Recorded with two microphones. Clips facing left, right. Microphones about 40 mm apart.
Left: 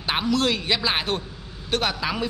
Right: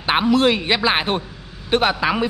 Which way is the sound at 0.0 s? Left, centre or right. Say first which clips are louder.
Right 7 dB; right.